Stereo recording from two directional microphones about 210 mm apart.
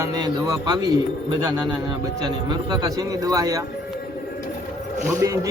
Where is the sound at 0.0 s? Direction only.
15° right (ahead or behind).